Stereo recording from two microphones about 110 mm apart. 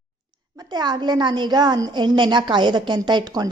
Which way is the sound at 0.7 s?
40° right (ahead or behind).